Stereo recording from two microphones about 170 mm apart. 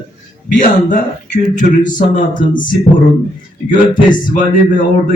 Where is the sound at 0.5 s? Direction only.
50° left (ahead or behind).